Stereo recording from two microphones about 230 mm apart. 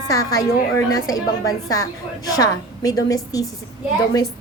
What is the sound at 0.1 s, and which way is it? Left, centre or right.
A woman's voice, centre.